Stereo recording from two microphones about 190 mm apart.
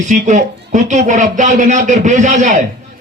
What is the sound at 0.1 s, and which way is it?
A man's voice, 40° right (ahead or behind).